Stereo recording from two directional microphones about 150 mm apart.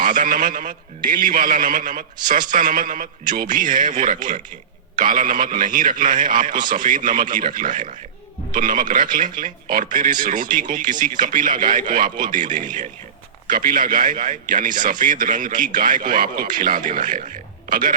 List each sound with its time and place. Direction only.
0.0 s a man's voice: 65° right (ahead or behind)